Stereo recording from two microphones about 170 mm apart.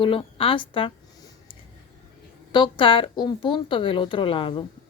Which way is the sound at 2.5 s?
30° left (ahead or behind).